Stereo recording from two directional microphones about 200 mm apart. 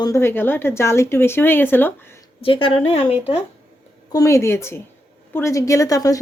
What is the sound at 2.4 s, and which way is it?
Speech, 25° left (ahead or behind).